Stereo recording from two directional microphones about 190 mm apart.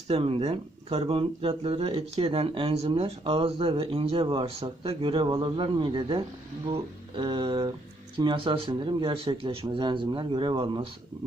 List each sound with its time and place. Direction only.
0.1 s speech: 30° right (ahead or behind)